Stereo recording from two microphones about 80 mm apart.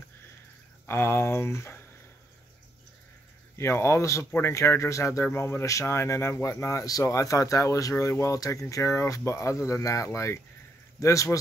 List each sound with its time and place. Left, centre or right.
0.8 s a man's voice: left
3.5 s a man's voice: left